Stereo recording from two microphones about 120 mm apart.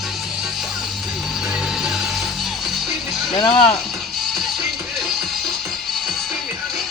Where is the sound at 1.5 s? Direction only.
5° right (ahead or behind).